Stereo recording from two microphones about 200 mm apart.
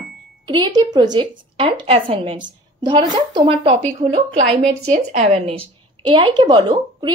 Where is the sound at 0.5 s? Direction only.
20° right (ahead or behind).